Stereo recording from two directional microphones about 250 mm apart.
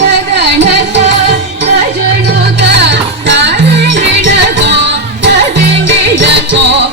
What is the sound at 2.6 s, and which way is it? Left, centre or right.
Music, right.